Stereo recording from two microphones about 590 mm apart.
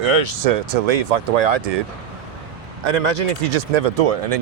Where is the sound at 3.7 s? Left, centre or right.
Right.